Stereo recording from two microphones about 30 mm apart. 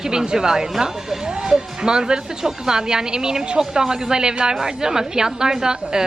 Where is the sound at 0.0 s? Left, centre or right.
Right.